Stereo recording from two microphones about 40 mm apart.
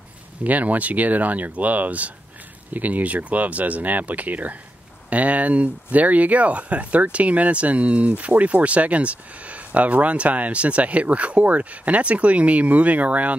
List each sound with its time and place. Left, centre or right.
0.4 s speech: right